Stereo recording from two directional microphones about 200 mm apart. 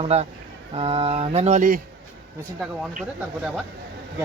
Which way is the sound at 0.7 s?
30° right (ahead or behind).